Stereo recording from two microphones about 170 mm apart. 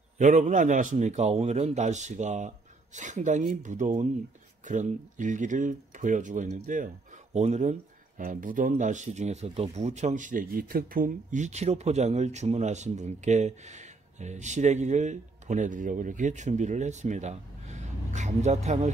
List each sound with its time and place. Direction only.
0.2 s a man's voice: 45° right (ahead or behind)
8.2 s a man's voice: 55° right (ahead or behind)